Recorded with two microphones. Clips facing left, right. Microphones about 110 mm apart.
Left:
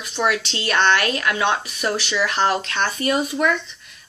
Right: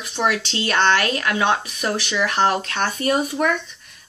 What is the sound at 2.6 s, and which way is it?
Speech, 35° right (ahead or behind).